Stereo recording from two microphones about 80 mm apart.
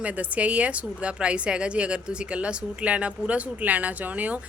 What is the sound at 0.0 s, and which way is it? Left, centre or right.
A woman's voice, centre.